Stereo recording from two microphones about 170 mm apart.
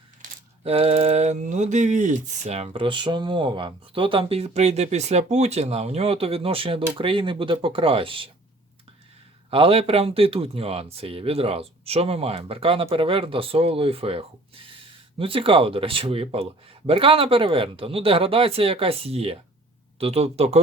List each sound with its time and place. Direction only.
0.2 s coin: 35° right (ahead or behind)
9.5 s coin: 35° right (ahead or behind)